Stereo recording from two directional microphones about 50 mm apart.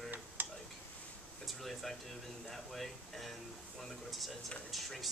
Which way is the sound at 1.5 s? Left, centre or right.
Centre.